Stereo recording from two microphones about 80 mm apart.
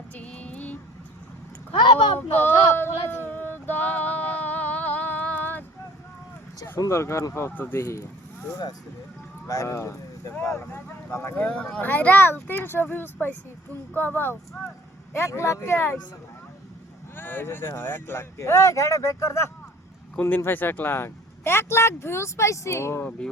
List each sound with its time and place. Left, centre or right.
0.2 s a sound: centre
1.7 s speech: left
2.1 s female singing: left
6.7 s speech: left
7.8 s speech: left
9.5 s speech: left
11.3 s speech: centre
17.2 s speech: left